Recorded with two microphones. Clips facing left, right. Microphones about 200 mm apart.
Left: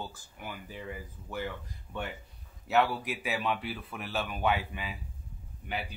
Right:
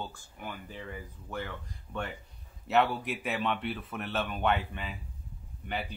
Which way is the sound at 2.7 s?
Centre (ahead or behind).